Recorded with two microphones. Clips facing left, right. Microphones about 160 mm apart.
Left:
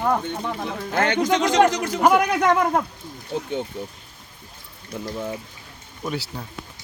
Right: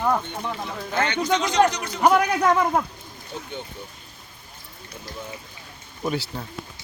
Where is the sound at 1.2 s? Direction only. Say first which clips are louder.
Left 2 dB; 90° left.